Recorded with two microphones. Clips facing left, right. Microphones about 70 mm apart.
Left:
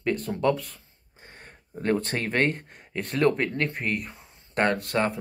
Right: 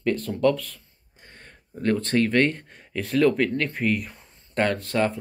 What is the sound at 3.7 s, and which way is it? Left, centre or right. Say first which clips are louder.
Speech: right 5 dB; centre.